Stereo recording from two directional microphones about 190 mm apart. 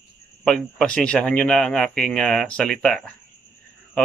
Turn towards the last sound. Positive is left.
turn(degrees=5)  # may be behind; listen again after turning